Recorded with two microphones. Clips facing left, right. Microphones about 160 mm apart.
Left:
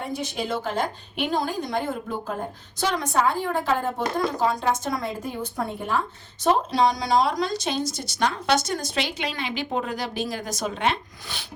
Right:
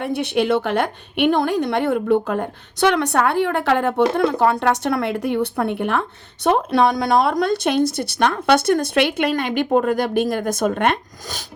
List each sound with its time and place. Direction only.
0.0 s a woman's voice: 65° right (ahead or behind); by 11.4 s 50° right (ahead or behind)